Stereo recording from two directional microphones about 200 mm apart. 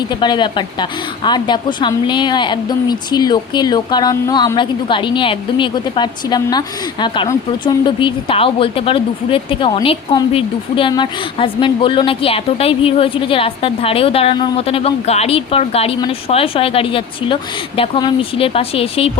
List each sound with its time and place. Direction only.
0.2 s a woman's voice: 25° left (ahead or behind)